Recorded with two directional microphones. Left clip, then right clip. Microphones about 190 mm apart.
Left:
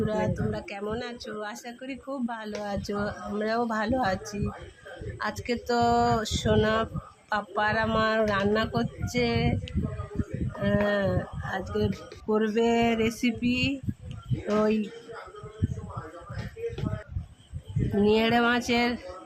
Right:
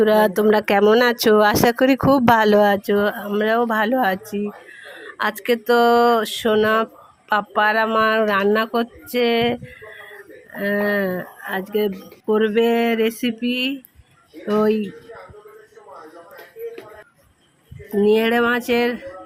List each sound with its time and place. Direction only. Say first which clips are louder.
0.0 s speech: right 14 dB; 45° right (ahead or behind); by 2.6 s 65° right (ahead or behind)
2.6 s speech: right 14 dB; 40° right (ahead or behind)
5.4 s speech: right 10 dB; 35° right (ahead or behind)
10.6 s speech: right 6 dB; 20° right (ahead or behind)
17.9 s speech: right 7 dB; 20° right (ahead or behind)